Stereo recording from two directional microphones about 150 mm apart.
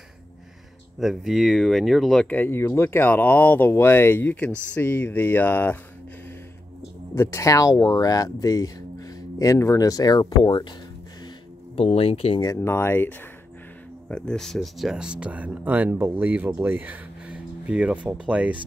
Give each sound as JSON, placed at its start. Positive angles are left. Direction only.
{"t": 0.9, "sound": "speech", "side_deg": 0}
{"t": 2.2, "sound": "speech", "side_deg": 15}
{"t": 7.2, "sound": "speech", "side_deg": 20}
{"t": 11.7, "sound": "speech", "side_deg": 40}
{"t": 12.4, "sound": "speech", "side_deg": 20}